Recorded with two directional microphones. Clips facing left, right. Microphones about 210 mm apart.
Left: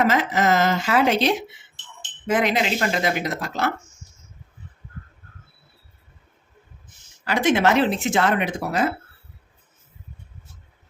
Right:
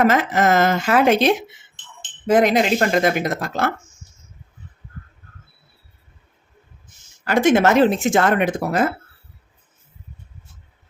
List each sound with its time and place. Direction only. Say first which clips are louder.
0.0 s speech: right 3 dB; 50° right (ahead or behind)
7.3 s speech: right 4 dB; 50° right (ahead or behind)